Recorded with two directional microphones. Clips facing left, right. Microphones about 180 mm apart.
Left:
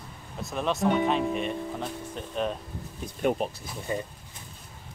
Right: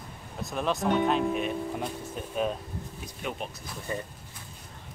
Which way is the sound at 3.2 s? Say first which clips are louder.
Left 10 dB; 45° left (ahead or behind).